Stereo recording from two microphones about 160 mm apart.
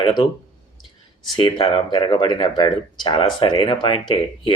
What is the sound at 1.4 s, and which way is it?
Speech, 30° left (ahead or behind).